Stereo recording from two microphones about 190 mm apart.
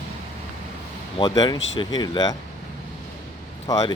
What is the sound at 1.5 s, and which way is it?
Speech, 90° left.